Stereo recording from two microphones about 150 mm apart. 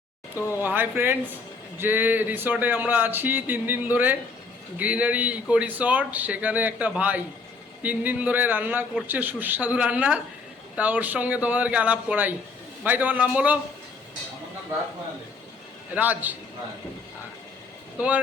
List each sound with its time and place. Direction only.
0.3 s speech: 20° left (ahead or behind)
0.6 s speech: 15° right (ahead or behind)
16.0 s speech: 10° right (ahead or behind)